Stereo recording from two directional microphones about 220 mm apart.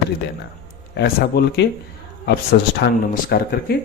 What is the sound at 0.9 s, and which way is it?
Speech, 50° left (ahead or behind).